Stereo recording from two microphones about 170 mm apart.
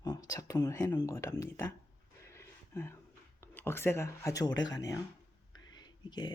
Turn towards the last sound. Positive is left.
turn(degrees=25)  # may be behind; listen again after turning